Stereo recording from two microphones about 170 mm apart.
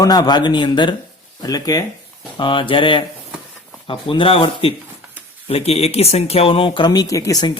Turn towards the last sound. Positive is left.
turn(degrees=20)  # may be behind; listen again after turning